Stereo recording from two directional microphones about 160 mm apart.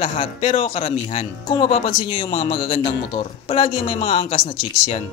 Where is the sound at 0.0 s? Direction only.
40° left (ahead or behind).